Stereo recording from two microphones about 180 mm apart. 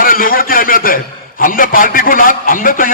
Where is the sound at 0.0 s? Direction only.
55° left (ahead or behind).